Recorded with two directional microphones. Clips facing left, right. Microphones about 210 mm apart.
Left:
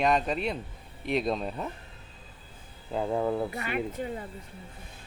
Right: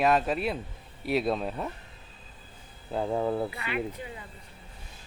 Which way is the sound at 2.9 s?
Centre (ahead or behind).